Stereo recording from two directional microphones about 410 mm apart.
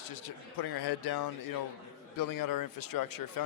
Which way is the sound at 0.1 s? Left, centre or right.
Left.